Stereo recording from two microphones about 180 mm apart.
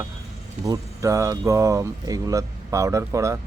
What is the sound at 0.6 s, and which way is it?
Speech, 20° right (ahead or behind).